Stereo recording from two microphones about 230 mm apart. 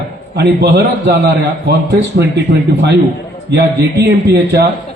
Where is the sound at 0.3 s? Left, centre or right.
Right.